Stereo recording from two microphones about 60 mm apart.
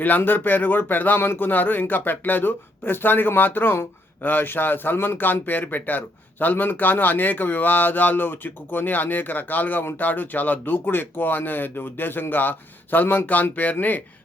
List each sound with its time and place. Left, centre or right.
0.0 s a man's voice: left